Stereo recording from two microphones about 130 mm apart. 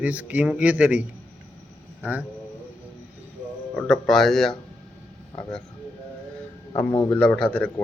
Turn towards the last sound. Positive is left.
turn(degrees=5)  # may be behind; listen again after turning